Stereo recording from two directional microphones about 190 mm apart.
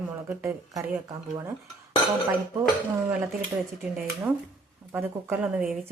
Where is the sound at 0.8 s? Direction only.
15° right (ahead or behind).